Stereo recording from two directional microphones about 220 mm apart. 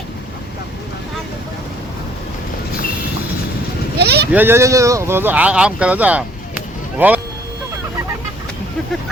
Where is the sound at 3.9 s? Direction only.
50° right (ahead or behind).